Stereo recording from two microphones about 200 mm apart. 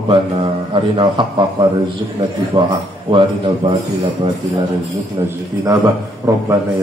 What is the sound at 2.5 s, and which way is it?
Speech, 20° right (ahead or behind).